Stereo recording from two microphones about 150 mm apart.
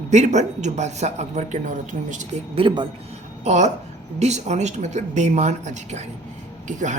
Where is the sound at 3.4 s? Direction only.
50° right (ahead or behind).